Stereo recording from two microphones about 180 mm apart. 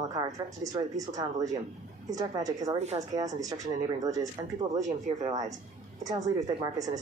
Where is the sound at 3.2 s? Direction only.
20° right (ahead or behind).